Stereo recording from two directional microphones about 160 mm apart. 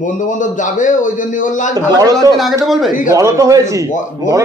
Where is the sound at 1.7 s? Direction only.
20° right (ahead or behind).